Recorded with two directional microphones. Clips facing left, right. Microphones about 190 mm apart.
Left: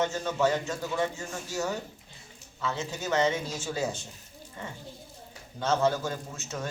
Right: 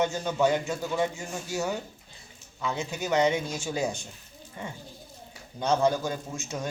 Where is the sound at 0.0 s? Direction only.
10° right (ahead or behind).